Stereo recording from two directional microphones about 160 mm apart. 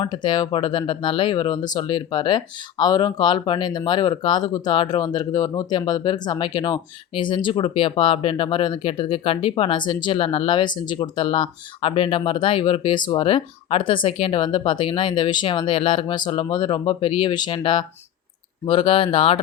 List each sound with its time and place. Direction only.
0.0 s speech: 30° left (ahead or behind)